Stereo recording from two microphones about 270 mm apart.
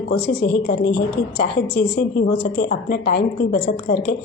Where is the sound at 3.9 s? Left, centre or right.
Left.